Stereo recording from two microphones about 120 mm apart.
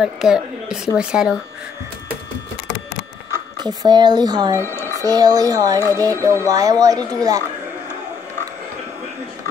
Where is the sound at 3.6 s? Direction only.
35° right (ahead or behind).